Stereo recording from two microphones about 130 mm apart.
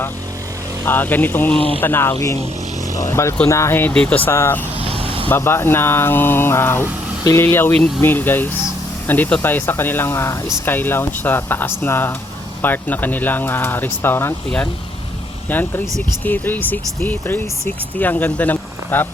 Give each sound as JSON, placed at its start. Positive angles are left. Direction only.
{"t": 0.9, "sound": "speech", "side_deg": 15}
{"t": 4.8, "sound": "vehicle", "side_deg": -45}
{"t": 5.3, "sound": "speech", "side_deg": 20}
{"t": 15.4, "sound": "speech", "side_deg": 15}